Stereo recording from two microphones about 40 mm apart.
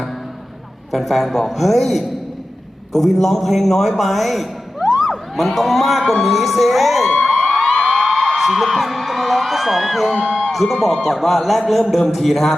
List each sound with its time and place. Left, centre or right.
0.9 s a man's voice: centre
7.3 s a sound: centre
7.9 s a man's voice: centre